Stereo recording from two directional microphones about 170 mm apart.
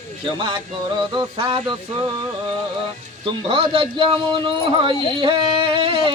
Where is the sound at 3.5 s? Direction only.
30° right (ahead or behind).